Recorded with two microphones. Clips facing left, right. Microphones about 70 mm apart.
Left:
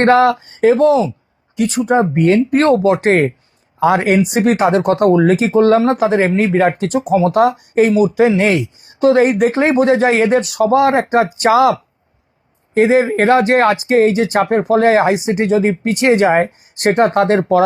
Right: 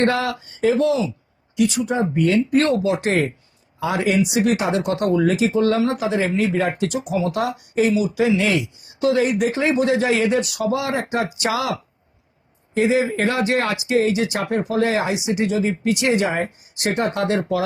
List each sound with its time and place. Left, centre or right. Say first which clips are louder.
0.0 s speech: left 9 dB; left